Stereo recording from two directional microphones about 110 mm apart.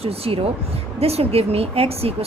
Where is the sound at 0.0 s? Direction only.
65° right (ahead or behind).